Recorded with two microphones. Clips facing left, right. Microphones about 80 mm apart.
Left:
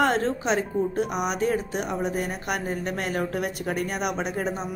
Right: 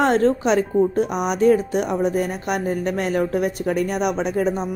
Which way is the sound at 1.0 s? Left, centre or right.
Right.